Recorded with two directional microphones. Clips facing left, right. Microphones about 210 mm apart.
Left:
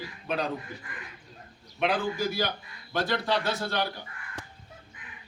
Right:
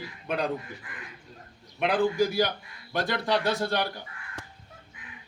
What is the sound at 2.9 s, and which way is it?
Speech, 15° right (ahead or behind).